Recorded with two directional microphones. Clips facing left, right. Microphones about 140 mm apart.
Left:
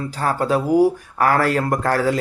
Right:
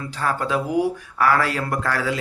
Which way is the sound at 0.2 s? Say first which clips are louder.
Left 3 dB; 40° left (ahead or behind).